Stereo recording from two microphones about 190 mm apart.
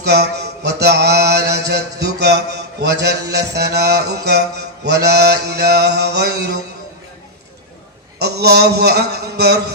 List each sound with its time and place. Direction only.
0.0 s mantra: 60° right (ahead or behind)
8.2 s mantra: 60° right (ahead or behind)